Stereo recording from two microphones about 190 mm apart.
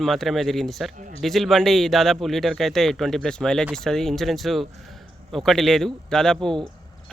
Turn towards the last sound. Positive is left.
turn(degrees=5)  # may be behind; listen again after turning